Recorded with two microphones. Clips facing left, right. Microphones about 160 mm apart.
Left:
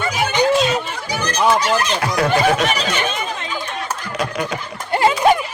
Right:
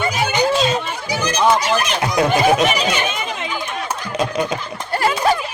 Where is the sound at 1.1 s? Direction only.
10° right (ahead or behind).